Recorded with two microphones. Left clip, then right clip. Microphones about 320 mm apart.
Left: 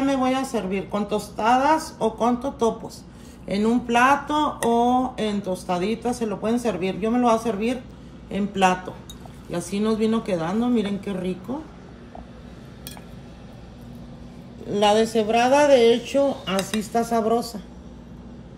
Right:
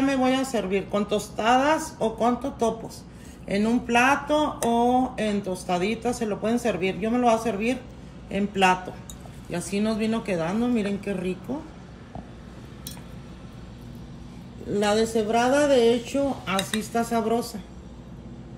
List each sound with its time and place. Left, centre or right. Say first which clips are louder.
0.0 s speech: left 1 dB; centre
9.7 s speech: left 4 dB; centre
14.7 s speech: left 4 dB; centre